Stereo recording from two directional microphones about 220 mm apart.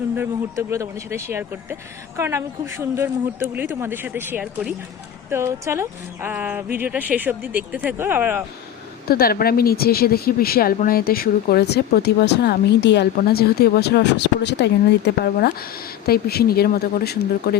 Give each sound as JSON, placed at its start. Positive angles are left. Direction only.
{"t": 0.2, "sound": "speech", "side_deg": -15}
{"t": 9.0, "sound": "speech", "side_deg": 45}